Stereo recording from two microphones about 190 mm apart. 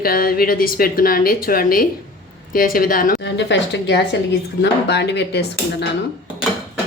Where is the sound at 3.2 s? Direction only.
65° left (ahead or behind).